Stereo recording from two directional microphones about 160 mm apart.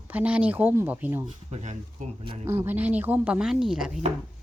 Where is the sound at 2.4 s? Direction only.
15° right (ahead or behind).